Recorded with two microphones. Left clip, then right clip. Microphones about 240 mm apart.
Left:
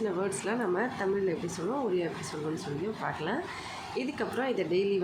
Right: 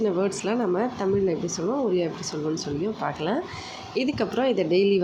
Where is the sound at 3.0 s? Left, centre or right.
Centre.